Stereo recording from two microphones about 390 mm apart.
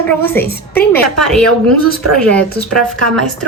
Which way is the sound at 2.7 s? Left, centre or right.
Right.